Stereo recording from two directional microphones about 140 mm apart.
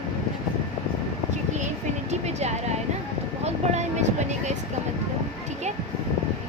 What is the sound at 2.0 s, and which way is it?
Vehicle, 50° right (ahead or behind).